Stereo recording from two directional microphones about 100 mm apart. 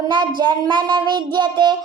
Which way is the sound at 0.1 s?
50° right (ahead or behind).